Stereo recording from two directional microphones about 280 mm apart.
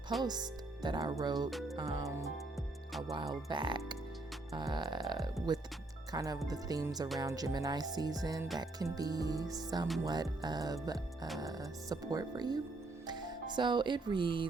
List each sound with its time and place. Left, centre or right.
0.2 s music: centre
1.5 s music: centre
1.7 s music: centre
3.5 s music: centre
13.1 s speech: centre